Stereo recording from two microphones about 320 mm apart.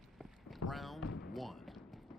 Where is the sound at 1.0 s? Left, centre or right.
Left.